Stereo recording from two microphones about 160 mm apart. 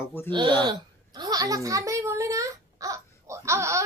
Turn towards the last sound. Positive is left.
turn(degrees=-20)  # may be behind; listen again after turning